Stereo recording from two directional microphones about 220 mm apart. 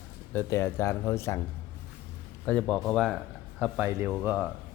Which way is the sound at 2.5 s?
5° left (ahead or behind).